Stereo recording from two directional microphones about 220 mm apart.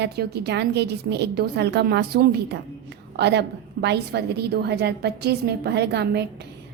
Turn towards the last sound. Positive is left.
turn(degrees=-50)  # may be behind; listen again after turning